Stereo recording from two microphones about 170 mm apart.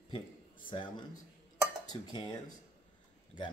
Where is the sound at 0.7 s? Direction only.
30° left (ahead or behind).